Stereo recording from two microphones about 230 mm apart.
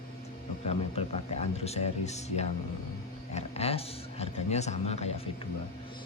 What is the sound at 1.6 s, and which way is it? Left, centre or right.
Speech, left.